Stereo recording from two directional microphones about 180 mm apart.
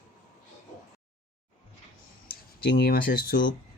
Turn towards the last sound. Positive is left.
turn(degrees=55)  # may be behind; listen again after turning